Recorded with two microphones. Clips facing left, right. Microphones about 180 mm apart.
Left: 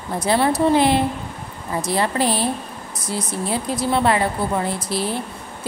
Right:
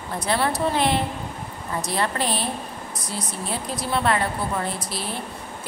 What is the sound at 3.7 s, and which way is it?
Speech, 25° left (ahead or behind).